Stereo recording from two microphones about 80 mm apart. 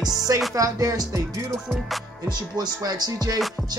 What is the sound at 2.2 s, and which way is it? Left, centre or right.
Music, right.